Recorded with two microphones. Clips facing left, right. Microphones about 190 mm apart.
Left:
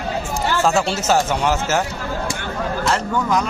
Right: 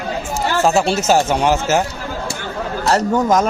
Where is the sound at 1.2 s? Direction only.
25° right (ahead or behind).